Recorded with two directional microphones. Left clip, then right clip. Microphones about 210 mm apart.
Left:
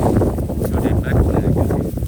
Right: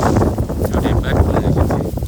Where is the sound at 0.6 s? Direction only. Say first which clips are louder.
Right 2 dB; 5° right (ahead or behind).